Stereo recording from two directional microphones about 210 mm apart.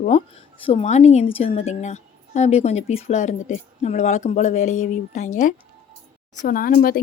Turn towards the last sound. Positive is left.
turn(degrees=45)  # may be behind; listen again after turning